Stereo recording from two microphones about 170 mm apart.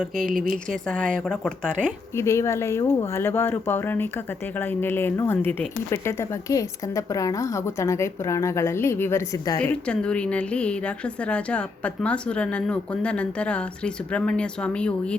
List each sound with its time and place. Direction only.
0.2 s speech: 55° right (ahead or behind)
0.7 s speech: 5° left (ahead or behind)
2.1 s a woman's voice: 15° left (ahead or behind)